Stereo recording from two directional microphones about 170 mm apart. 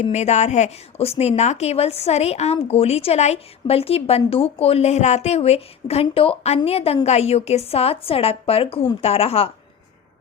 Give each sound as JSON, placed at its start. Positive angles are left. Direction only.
{"t": 0.0, "sound": "a woman's voice", "side_deg": 40}